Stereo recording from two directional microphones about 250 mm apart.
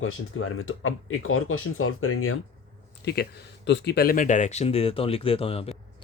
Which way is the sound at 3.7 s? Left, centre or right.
Left.